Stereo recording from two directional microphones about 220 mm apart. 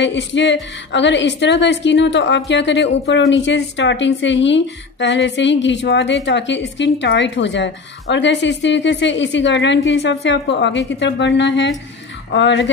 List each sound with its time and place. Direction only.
0.0 s a woman's voice: 55° left (ahead or behind)